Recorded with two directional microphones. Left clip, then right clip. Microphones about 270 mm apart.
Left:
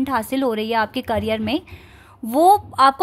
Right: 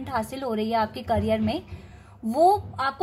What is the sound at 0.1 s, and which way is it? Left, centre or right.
A woman's voice, left.